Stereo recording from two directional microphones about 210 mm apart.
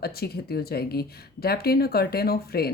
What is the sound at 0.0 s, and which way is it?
Speech, 50° left (ahead or behind).